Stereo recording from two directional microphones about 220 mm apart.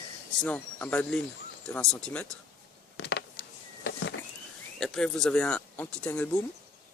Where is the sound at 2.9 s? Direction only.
55° left (ahead or behind).